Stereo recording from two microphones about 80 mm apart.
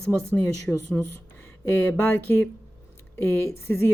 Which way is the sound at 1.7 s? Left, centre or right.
Left.